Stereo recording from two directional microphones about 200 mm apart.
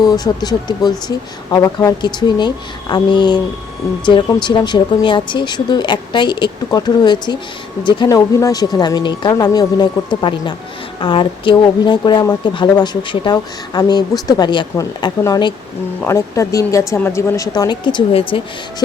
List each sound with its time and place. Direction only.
0.0 s speech: 20° left (ahead or behind)